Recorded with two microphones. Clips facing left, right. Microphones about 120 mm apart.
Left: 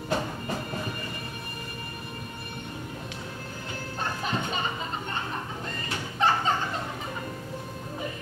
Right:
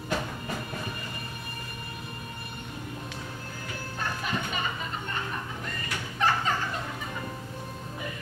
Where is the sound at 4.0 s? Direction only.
25° left (ahead or behind).